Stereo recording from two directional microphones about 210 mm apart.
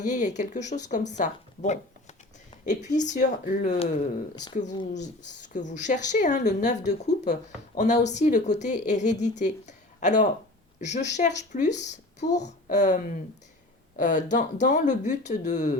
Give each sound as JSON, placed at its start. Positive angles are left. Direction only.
{"t": 0.0, "sound": "a woman's voice", "side_deg": 35}
{"t": 5.5, "sound": "a woman's voice", "side_deg": 35}